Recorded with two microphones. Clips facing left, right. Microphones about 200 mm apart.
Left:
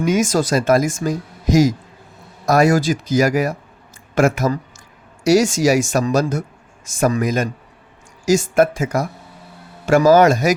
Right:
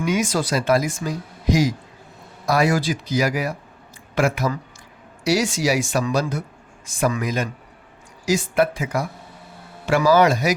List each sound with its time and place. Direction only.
0.0 s speech: 45° left (ahead or behind)